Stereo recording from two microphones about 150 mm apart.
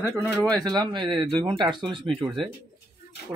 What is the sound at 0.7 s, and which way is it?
Speech, 30° right (ahead or behind).